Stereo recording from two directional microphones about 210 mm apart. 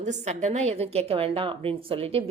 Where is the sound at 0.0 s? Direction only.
35° right (ahead or behind).